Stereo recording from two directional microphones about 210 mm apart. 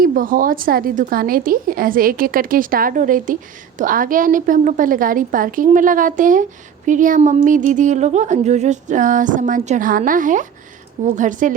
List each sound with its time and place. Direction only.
0.0 s a woman's voice: 40° right (ahead or behind)